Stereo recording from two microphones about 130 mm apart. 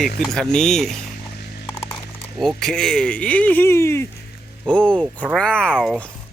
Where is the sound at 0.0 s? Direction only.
Centre (ahead or behind).